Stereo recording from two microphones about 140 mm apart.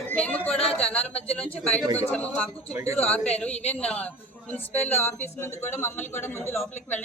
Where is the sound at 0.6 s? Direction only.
45° left (ahead or behind).